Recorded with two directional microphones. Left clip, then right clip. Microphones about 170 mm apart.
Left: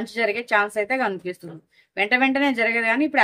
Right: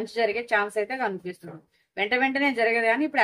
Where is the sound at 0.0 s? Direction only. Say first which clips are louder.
Left 2 dB; 45° left (ahead or behind).